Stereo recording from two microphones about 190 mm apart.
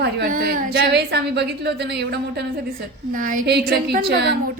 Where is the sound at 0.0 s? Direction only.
55° right (ahead or behind).